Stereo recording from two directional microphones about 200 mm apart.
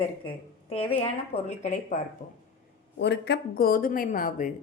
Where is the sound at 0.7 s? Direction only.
30° left (ahead or behind).